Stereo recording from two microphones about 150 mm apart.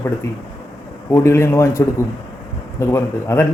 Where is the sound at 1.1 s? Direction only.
20° left (ahead or behind).